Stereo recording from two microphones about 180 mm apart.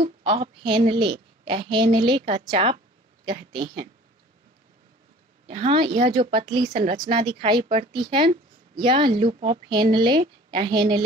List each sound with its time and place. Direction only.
0.0 s speech: 30° right (ahead or behind)
5.5 s a woman's voice: 30° right (ahead or behind)